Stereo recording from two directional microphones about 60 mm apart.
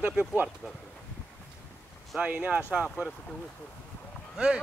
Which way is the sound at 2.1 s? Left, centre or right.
Right.